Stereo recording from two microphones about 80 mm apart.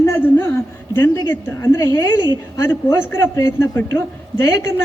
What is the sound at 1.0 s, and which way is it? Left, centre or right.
Speech, left.